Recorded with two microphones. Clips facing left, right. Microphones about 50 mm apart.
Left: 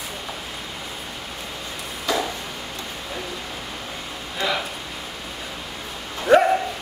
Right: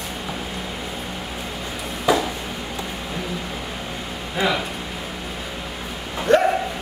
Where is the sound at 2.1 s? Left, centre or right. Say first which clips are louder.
Right 5 dB; centre.